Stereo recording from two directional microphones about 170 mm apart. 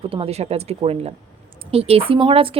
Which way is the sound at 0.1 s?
35° right (ahead or behind).